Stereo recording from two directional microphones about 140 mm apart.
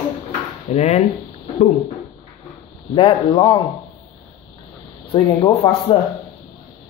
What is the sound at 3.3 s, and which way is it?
Speech, 25° left (ahead or behind).